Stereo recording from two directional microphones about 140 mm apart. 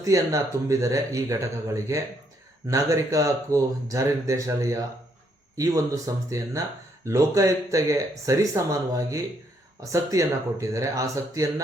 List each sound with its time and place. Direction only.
0.0 s speech: 25° right (ahead or behind)